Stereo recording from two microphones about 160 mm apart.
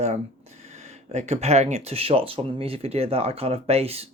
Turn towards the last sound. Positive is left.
turn(degrees=-40)  # may be behind; listen again after turning